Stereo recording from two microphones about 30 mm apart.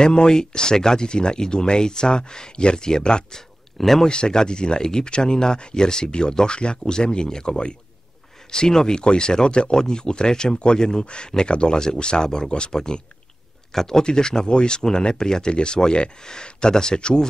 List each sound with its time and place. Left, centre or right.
0.0 s speech: left
3.3 s a sound: centre
4.1 s speech: left
14.0 s speech: left